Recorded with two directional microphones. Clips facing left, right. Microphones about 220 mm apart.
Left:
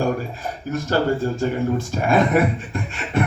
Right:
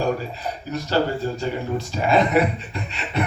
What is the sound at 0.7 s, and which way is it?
A man's voice, 50° left (ahead or behind).